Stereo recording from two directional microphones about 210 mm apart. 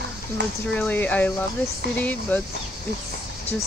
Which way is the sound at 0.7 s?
5° left (ahead or behind).